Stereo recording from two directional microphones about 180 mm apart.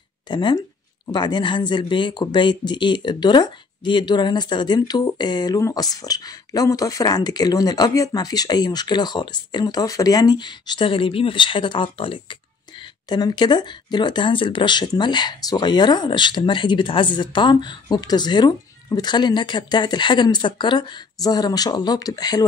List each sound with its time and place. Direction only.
0.3 s speech: 25° left (ahead or behind)